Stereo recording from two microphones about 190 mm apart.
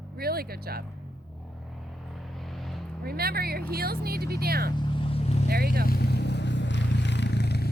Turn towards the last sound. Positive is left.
turn(degrees=60)  # may be behind; listen again after turning